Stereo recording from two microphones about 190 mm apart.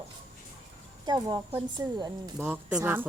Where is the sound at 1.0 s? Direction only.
20° right (ahead or behind).